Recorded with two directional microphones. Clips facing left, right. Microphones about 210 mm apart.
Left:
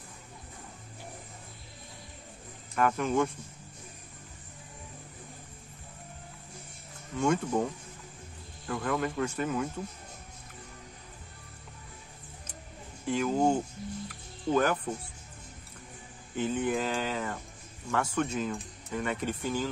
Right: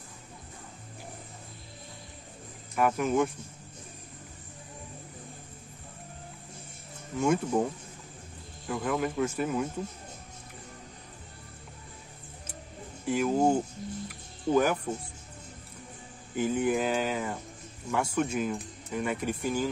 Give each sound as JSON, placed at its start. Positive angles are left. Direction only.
{"t": 2.7, "sound": "speech", "side_deg": -5}
{"t": 7.2, "sound": "speech", "side_deg": -5}
{"t": 8.6, "sound": "speech", "side_deg": -5}
{"t": 13.0, "sound": "speech", "side_deg": -5}
{"t": 16.3, "sound": "speech", "side_deg": -10}